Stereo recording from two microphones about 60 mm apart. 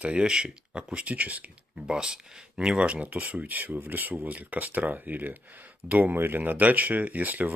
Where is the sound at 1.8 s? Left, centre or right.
Centre.